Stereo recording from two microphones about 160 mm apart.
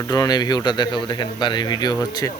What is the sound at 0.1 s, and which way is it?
Speech, 25° left (ahead or behind).